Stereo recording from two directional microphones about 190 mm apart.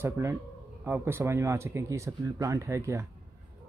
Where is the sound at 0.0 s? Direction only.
15° right (ahead or behind).